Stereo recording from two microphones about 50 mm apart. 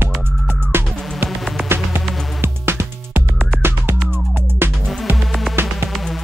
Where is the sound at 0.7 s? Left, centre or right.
Right.